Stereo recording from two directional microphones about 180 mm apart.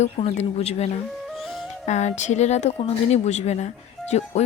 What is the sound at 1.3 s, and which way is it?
Music, centre (ahead or behind).